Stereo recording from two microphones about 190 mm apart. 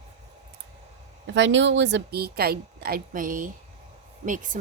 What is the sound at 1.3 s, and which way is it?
Speech, 75° right (ahead or behind).